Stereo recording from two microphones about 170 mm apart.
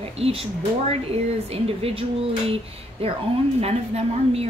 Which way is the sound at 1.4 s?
35° right (ahead or behind).